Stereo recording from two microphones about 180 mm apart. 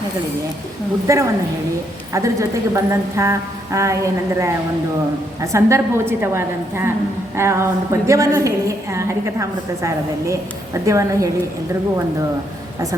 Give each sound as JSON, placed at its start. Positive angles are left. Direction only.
{"t": 1.0, "sound": "a woman's voice", "side_deg": -15}